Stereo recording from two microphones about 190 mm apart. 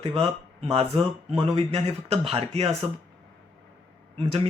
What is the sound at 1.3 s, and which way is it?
Speech, 35° right (ahead or behind).